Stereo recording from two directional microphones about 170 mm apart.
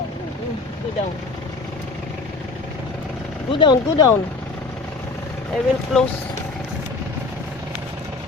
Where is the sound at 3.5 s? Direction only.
25° left (ahead or behind).